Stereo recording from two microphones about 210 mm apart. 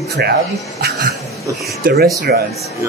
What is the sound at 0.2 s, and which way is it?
Speech, 50° right (ahead or behind).